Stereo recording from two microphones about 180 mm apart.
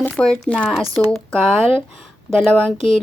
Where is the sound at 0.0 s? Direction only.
5° left (ahead or behind).